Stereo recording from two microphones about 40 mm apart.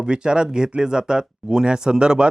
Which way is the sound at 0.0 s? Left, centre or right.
Right.